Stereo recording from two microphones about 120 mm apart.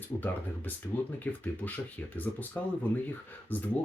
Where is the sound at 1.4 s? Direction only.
15° left (ahead or behind).